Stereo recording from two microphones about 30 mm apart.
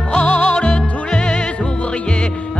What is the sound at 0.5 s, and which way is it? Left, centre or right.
Music, left.